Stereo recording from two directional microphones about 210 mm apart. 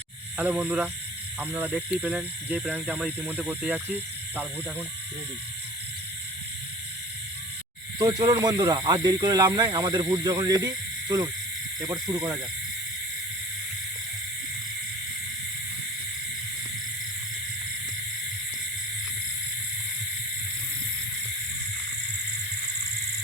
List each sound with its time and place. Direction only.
0.3 s speech: 5° right (ahead or behind)
7.9 s speech: 20° right (ahead or behind)